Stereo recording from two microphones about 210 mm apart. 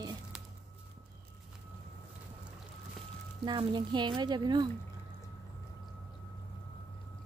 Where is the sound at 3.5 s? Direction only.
20° right (ahead or behind).